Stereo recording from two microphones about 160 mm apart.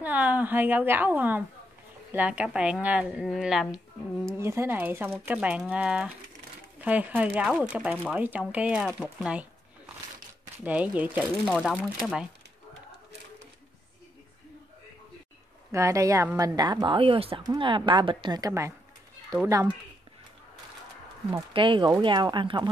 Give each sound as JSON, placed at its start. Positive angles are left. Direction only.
{"t": 0.0, "sound": "a woman's voice", "side_deg": -10}
{"t": 4.4, "sound": "a woman's voice", "side_deg": -15}
{"t": 10.6, "sound": "a woman's voice", "side_deg": -10}
{"t": 11.4, "sound": "a woman's voice", "side_deg": 0}
{"t": 15.7, "sound": "a woman's voice", "side_deg": -20}
{"t": 21.5, "sound": "a woman's voice", "side_deg": -30}